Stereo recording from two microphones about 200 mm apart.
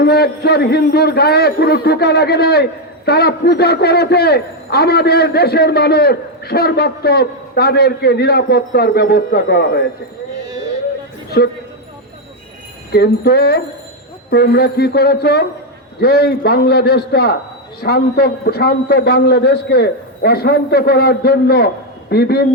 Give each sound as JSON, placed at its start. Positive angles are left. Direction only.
{"t": 0.0, "sound": "a man's voice", "side_deg": 55}
{"t": 12.9, "sound": "a man's voice", "side_deg": 50}